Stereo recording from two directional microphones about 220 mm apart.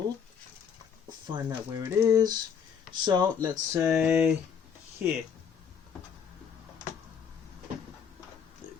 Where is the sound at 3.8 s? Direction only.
5° right (ahead or behind).